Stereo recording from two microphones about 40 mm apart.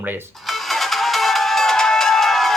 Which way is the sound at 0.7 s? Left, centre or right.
Centre.